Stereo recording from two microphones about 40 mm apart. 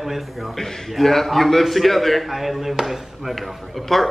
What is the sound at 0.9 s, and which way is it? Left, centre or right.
A man's voice, centre.